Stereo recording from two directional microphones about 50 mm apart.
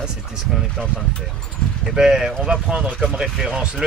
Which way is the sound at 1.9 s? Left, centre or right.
Centre.